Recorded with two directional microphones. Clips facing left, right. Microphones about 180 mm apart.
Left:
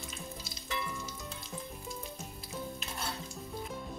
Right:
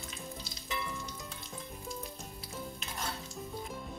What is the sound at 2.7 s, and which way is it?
Stir, centre (ahead or behind).